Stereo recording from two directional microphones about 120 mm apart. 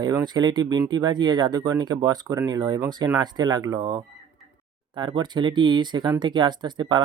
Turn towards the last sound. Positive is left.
turn(degrees=-40)  # may be behind; listen again after turning